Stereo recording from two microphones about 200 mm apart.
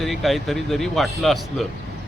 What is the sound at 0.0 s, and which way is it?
Speech, centre (ahead or behind).